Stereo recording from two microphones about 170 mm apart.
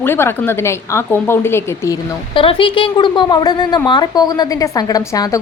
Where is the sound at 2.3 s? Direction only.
30° left (ahead or behind).